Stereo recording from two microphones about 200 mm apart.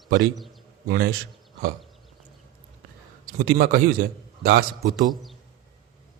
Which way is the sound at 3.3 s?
45° right (ahead or behind).